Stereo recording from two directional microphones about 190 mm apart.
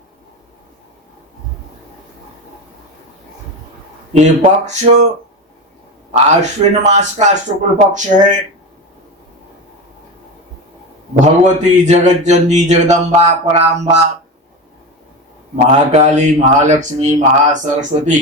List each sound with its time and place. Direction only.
4.2 s speech: 35° right (ahead or behind)
6.1 s speech: 35° right (ahead or behind)
11.2 s speech: 40° right (ahead or behind)
15.5 s speech: 35° right (ahead or behind)